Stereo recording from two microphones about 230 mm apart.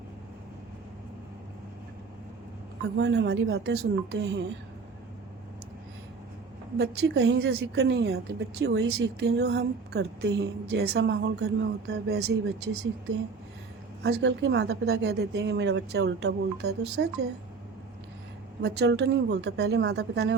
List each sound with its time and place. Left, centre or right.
3.0 s a woman's voice: right
6.7 s a woman's voice: right
14.0 s a woman's voice: right
18.6 s a woman's voice: right